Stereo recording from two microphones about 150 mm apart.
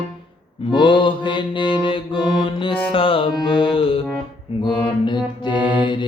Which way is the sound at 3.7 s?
35° left (ahead or behind).